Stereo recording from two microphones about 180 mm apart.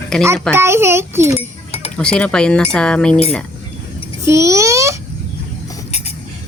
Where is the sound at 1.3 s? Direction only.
35° left (ahead or behind).